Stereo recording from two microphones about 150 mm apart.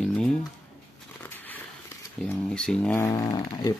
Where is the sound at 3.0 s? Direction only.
25° left (ahead or behind).